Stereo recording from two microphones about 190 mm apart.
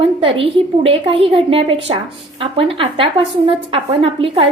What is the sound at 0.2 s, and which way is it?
A woman's voice, 30° right (ahead or behind).